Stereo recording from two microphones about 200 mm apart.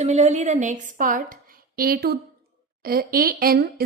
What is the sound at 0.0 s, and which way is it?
A woman's voice, 35° right (ahead or behind).